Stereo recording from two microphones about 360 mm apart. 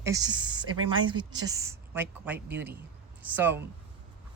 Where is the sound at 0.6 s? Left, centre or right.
Right.